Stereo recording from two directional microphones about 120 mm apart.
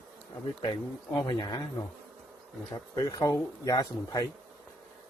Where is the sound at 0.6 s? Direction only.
35° left (ahead or behind).